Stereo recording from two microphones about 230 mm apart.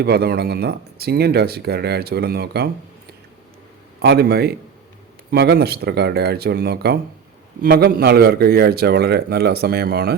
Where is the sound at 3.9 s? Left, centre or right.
Right.